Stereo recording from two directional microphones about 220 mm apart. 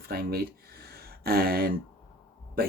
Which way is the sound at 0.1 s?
45° right (ahead or behind).